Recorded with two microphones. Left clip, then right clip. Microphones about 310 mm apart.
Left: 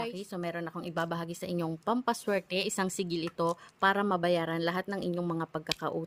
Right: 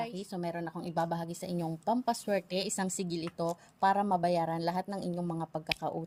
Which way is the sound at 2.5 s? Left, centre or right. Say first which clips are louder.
Left 3 dB; left.